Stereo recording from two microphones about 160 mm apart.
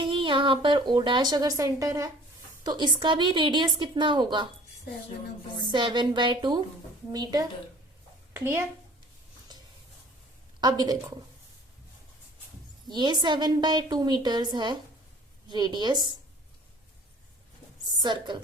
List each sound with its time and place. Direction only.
0.0 s speech: 30° right (ahead or behind)
5.6 s a woman's voice: 30° right (ahead or behind)
10.6 s speech: 25° right (ahead or behind)
12.9 s speech: 25° right (ahead or behind)
18.0 s speech: 30° right (ahead or behind)